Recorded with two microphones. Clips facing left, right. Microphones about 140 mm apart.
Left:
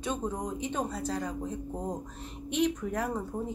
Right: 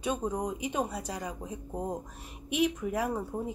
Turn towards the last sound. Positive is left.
turn(degrees=-10)  # may be behind; listen again after turning